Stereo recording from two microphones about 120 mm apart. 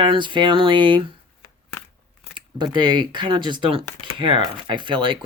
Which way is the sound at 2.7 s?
40° right (ahead or behind).